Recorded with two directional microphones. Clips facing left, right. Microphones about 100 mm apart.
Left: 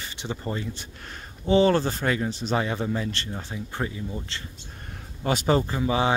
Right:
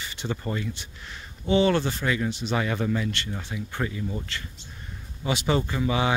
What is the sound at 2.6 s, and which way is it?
Speech, 25° left (ahead or behind).